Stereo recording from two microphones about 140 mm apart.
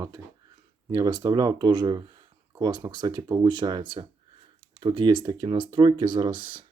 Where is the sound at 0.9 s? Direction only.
30° right (ahead or behind).